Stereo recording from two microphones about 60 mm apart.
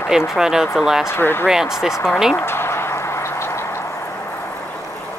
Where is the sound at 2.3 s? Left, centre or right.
Left.